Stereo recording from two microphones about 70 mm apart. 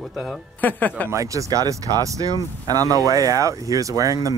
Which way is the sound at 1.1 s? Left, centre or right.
Right.